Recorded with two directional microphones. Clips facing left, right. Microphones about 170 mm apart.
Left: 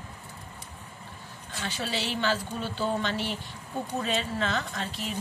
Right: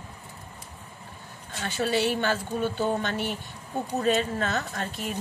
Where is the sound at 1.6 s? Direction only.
50° right (ahead or behind).